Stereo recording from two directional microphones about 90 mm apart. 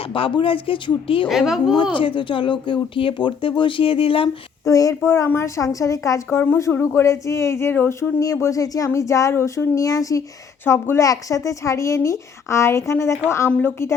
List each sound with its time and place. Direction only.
0.1 s speech: 70° left (ahead or behind)
1.3 s speech: 5° right (ahead or behind)
2.0 s speech: 70° left (ahead or behind); by 4.3 s 90° left
4.6 s speech: 40° left (ahead or behind)
8.2 s speech: 40° left (ahead or behind)
13.5 s a woman's voice: 20° left (ahead or behind)